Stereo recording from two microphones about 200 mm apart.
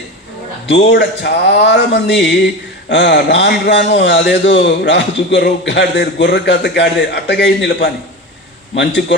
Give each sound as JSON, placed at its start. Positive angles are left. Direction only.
{"t": 0.7, "sound": "a man's voice", "side_deg": 60}